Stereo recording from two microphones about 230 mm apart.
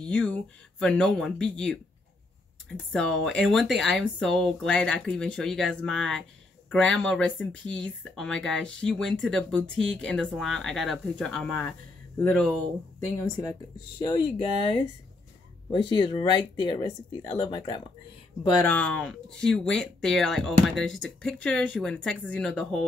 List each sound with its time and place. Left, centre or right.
0.1 s speech: centre
2.9 s speech: centre
13.9 s speech: left
18.7 s speech: centre